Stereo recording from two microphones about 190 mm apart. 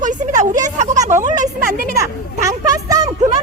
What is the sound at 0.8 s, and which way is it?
Speech, 40° right (ahead or behind).